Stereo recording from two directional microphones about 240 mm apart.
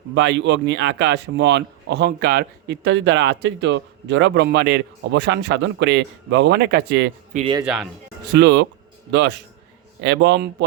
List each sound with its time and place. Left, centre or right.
0.1 s speech: right
7.3 s speech: right
7.6 s speech: centre
8.3 s speech: right
10.0 s speech: right